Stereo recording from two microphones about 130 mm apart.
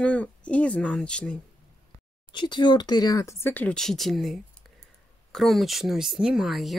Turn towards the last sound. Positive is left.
turn(degrees=0)  # may be behind; listen again after turning